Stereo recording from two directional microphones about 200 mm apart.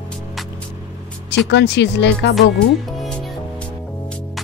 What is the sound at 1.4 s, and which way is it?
Speech, 60° left (ahead or behind).